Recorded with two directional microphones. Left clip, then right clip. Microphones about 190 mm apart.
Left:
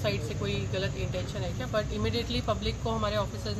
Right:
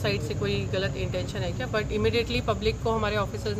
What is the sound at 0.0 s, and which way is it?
Speech, 30° right (ahead or behind).